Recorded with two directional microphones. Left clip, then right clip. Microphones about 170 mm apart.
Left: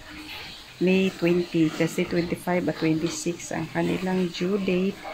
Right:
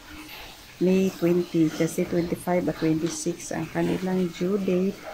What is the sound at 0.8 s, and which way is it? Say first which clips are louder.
Speech: even; 5° right (ahead or behind).